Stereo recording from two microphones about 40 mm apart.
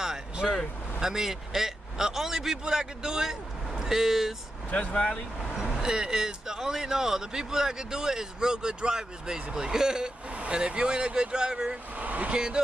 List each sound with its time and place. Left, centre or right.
0.0 s vehicle: centre
0.9 s a man's voice: centre
4.7 s speech: left
5.8 s speech: centre
12.0 s speech: right
12.3 s speech: right